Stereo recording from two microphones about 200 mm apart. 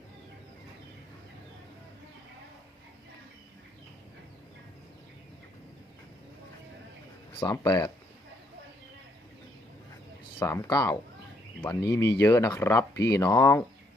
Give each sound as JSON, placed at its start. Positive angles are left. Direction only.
{"t": 7.3, "sound": "speech", "side_deg": 20}
{"t": 10.4, "sound": "speech", "side_deg": 15}